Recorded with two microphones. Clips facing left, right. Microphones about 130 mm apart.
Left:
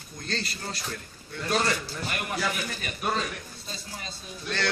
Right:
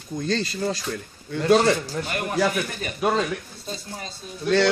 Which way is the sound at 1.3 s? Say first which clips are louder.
Right 10 dB; 90° right.